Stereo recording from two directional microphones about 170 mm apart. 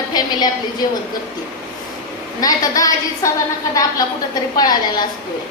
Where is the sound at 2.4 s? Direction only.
20° left (ahead or behind).